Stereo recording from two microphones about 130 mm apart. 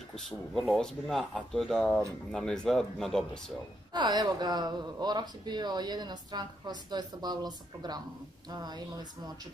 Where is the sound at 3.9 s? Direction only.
35° right (ahead or behind).